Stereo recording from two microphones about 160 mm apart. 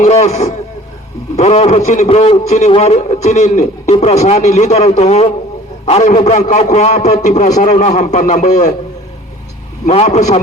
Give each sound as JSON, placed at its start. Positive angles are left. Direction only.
{"t": 0.0, "sound": "a man's voice", "side_deg": 45}
{"t": 9.8, "sound": "a man's voice", "side_deg": 45}